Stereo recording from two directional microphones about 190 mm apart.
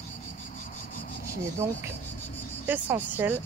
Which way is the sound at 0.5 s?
45° left (ahead or behind).